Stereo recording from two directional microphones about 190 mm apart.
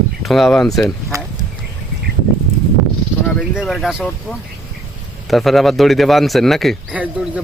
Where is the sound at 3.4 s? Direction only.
Centre (ahead or behind).